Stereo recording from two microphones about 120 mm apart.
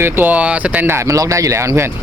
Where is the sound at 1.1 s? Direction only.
25° right (ahead or behind).